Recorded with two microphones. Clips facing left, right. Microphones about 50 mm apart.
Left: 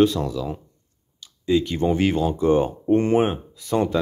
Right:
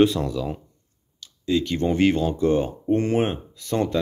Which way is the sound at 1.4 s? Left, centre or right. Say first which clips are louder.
Left 2 dB; centre.